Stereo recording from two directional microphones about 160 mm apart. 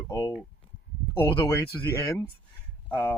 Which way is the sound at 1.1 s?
35° left (ahead or behind).